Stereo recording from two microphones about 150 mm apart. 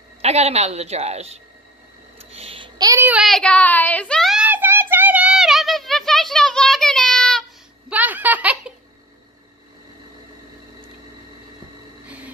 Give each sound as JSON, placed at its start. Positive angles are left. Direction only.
{"t": 0.2, "sound": "a woman's voice", "side_deg": -45}
{"t": 2.1, "sound": "a sound", "side_deg": -40}
{"t": 3.0, "sound": "speech", "side_deg": -10}
{"t": 3.3, "sound": "a woman's voice", "side_deg": 5}
{"t": 4.5, "sound": "a sound", "side_deg": -15}
{"t": 7.9, "sound": "giggle", "side_deg": -10}